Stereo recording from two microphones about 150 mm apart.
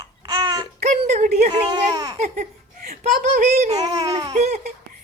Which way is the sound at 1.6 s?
25° right (ahead or behind).